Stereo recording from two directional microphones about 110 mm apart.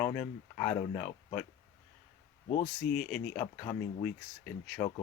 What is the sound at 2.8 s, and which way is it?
Speech, 10° left (ahead or behind).